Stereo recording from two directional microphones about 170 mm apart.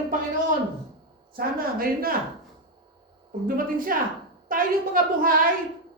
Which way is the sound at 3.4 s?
55° right (ahead or behind).